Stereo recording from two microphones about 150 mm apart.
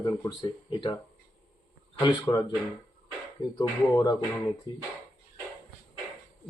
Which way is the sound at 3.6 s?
25° left (ahead or behind).